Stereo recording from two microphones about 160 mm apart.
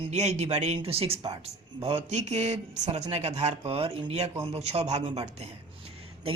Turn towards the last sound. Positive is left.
turn(degrees=-40)  # may be behind; listen again after turning